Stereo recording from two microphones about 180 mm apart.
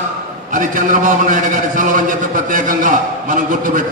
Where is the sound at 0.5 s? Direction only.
45° right (ahead or behind).